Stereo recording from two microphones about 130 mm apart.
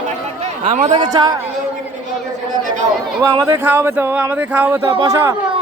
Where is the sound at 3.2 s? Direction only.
30° right (ahead or behind).